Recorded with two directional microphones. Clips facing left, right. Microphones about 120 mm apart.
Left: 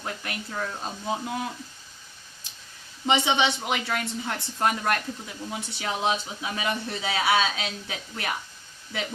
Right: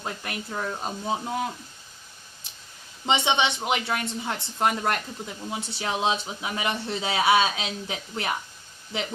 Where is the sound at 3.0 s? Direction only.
20° right (ahead or behind).